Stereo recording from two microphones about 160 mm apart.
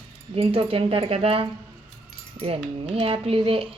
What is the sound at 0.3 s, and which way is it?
Speech, 35° right (ahead or behind).